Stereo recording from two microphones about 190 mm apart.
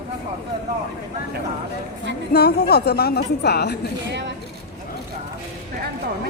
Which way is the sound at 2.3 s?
60° left (ahead or behind).